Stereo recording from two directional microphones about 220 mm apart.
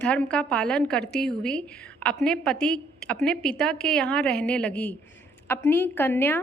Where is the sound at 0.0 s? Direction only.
5° left (ahead or behind).